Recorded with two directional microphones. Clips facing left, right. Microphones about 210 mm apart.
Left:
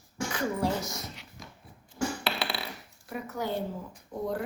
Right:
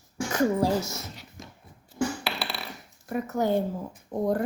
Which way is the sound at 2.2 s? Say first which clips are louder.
Left 1 dB; centre (ahead or behind).